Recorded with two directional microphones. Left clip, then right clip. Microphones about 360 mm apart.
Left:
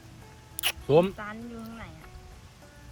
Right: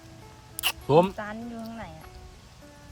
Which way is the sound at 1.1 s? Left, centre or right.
Right.